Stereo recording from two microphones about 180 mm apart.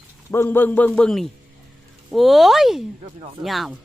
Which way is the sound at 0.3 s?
15° left (ahead or behind).